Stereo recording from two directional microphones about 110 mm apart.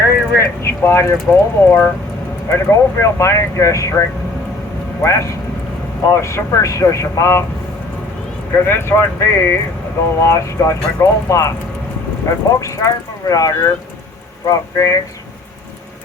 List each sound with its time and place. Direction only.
0.0 s speech: 25° left (ahead or behind)
5.0 s speech: 25° left (ahead or behind)
8.6 s speech: 20° left (ahead or behind)
12.5 s speech: 30° left (ahead or behind)